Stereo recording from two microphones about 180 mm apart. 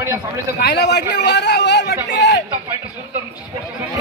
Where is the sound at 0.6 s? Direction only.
65° left (ahead or behind).